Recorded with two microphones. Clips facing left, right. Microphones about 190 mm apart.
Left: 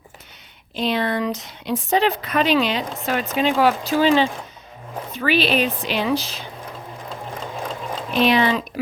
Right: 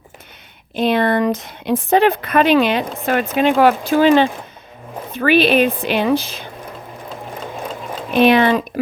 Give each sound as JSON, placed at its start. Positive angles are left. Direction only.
{"t": 0.8, "sound": "speech", "side_deg": -55}
{"t": 8.1, "sound": "speech", "side_deg": -55}